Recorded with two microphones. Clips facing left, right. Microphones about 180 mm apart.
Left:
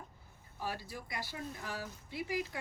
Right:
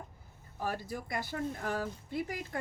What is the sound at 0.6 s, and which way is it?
Speech, 50° right (ahead or behind).